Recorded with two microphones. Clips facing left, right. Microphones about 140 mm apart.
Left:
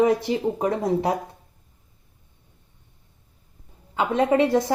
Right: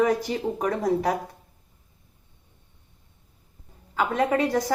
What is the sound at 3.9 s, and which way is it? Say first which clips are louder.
Speech: left 3 dB; 25° left (ahead or behind).